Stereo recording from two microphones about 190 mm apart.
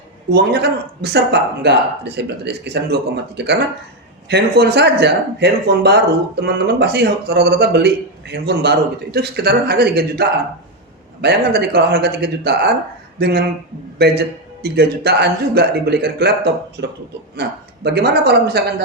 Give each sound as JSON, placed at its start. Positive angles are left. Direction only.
{"t": 0.3, "sound": "speech", "side_deg": -60}